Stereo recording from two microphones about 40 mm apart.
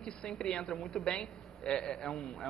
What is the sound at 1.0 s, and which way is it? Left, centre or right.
A woman's voice, centre.